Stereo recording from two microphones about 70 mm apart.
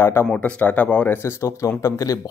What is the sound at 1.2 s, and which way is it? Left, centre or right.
Speech, left.